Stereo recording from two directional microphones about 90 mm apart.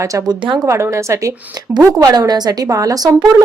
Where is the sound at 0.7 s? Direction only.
30° right (ahead or behind).